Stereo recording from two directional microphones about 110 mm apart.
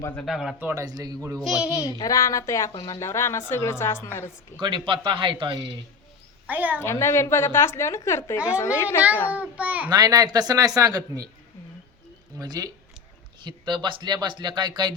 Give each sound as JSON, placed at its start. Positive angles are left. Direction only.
{"t": 0.3, "sound": "speech", "side_deg": 0}
{"t": 0.6, "sound": "a man's voice", "side_deg": -25}
{"t": 0.9, "sound": "speech", "side_deg": -35}
{"t": 1.5, "sound": "speech", "side_deg": -5}
{"t": 1.9, "sound": "a woman's voice", "side_deg": 35}
{"t": 4.6, "sound": "speech", "side_deg": -45}
{"t": 6.5, "sound": "a child's voice", "side_deg": -15}
{"t": 6.8, "sound": "a woman's voice", "side_deg": 25}
{"t": 9.3, "sound": "a child's voice", "side_deg": -15}
{"t": 9.9, "sound": "speech", "side_deg": -35}
{"t": 12.4, "sound": "speech", "side_deg": -35}